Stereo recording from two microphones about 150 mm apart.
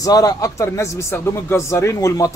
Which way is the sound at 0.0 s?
25° left (ahead or behind).